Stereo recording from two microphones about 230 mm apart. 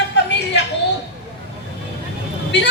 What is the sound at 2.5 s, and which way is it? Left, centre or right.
Vehicle, left.